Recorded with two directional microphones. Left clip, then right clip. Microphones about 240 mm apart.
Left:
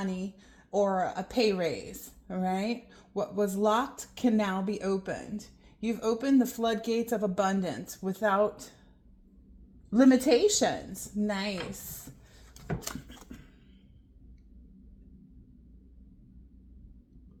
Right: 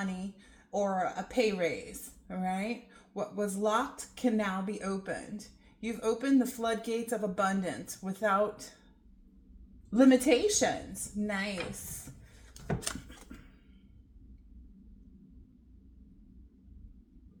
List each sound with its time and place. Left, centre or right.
0.0 s a woman's voice: left
9.9 s a woman's voice: left